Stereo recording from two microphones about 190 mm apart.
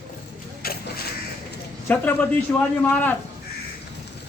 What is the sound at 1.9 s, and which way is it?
A man's voice, 5° left (ahead or behind).